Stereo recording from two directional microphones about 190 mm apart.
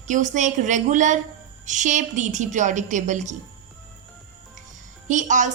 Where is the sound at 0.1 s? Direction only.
40° right (ahead or behind).